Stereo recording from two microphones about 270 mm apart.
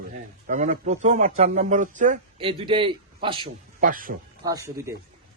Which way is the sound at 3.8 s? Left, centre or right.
Right.